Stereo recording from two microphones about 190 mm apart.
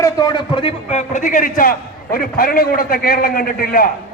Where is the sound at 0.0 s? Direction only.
20° left (ahead or behind).